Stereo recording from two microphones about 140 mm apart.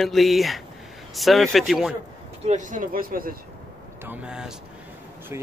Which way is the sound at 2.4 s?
65° right (ahead or behind).